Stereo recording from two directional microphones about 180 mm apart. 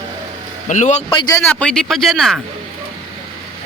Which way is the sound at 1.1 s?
25° left (ahead or behind).